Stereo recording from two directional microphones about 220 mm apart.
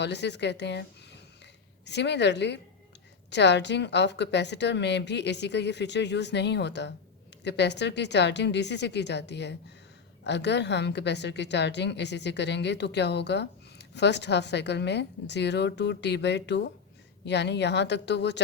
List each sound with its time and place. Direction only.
0.0 s a woman's voice: 50° left (ahead or behind)